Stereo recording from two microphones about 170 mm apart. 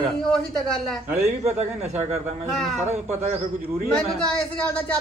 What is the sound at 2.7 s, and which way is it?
Speech, 40° right (ahead or behind).